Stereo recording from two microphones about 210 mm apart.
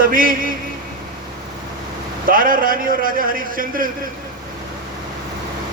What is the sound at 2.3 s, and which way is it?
A man's voice, 40° right (ahead or behind).